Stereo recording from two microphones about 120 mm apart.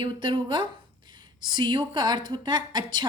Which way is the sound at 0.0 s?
45° right (ahead or behind).